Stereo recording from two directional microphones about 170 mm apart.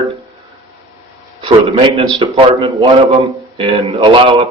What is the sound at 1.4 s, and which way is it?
Speech, 30° right (ahead or behind).